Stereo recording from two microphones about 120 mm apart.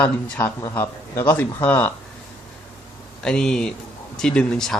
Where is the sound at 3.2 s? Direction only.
5° left (ahead or behind).